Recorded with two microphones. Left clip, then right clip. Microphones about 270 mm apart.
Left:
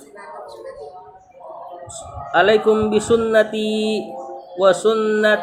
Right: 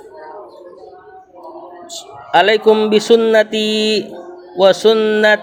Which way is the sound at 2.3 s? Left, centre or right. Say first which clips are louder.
Right 4 dB; right.